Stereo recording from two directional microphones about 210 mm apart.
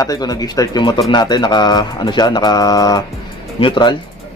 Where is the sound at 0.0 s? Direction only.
20° left (ahead or behind).